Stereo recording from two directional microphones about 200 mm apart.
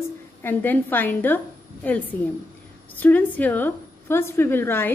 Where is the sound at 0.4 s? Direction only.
10° left (ahead or behind).